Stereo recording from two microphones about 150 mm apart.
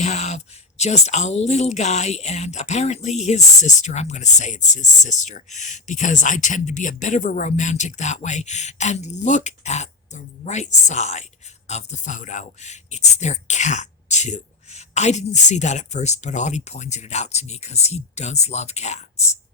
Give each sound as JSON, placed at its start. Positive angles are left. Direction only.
{"t": 0.0, "sound": "speech", "side_deg": 50}